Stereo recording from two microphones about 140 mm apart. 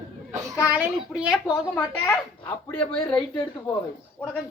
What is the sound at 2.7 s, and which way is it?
Speech, 5° left (ahead or behind).